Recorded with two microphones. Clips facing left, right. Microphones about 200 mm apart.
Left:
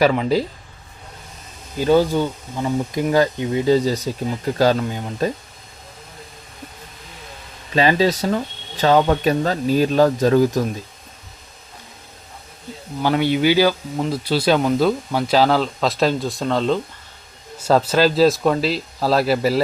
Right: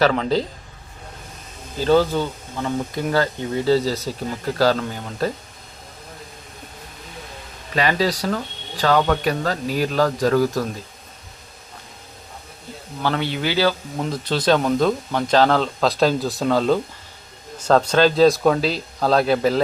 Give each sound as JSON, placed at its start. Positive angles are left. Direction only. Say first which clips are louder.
{"t": 0.0, "sound": "speech", "louder": "left 2 dB", "side_deg": 10}
{"t": 1.8, "sound": "speech", "louder": "left 1 dB", "side_deg": 15}
{"t": 7.8, "sound": "speech", "louder": "left 4 dB", "side_deg": 25}
{"t": 13.0, "sound": "speech", "louder": "left 5 dB", "side_deg": 15}
{"t": 17.6, "sound": "speech", "louder": "even", "side_deg": 5}